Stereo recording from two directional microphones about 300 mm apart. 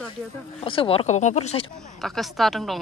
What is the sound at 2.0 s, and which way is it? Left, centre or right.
Speech, centre.